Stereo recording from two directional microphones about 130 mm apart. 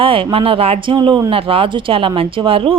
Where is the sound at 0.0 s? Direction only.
40° right (ahead or behind).